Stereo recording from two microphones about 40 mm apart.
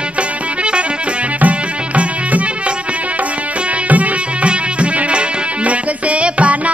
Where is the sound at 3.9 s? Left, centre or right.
Right.